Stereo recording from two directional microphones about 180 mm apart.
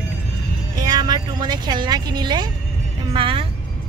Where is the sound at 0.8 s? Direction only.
20° right (ahead or behind).